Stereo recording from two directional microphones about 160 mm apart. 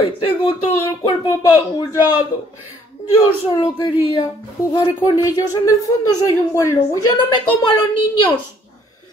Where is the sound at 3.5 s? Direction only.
30° left (ahead or behind).